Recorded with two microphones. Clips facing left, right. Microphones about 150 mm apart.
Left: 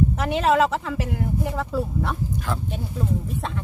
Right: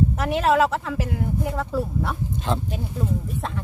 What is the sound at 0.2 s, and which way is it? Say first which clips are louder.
Speech: right 1 dB; centre (ahead or behind).